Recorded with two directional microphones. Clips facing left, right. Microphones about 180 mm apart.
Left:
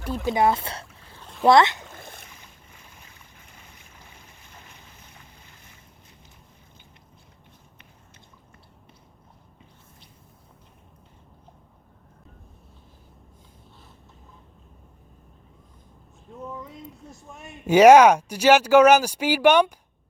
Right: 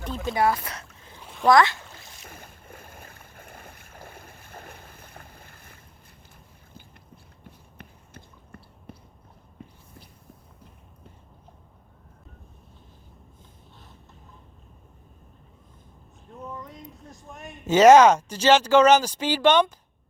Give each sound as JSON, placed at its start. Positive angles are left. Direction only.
{"t": 0.0, "sound": "speech", "side_deg": 10}
{"t": 0.3, "sound": "speech", "side_deg": 25}
{"t": 1.9, "sound": "boat", "side_deg": 55}
{"t": 2.3, "sound": "boat", "side_deg": -55}
{"t": 7.8, "sound": "a sound", "side_deg": -55}
{"t": 16.3, "sound": "a sound", "side_deg": 5}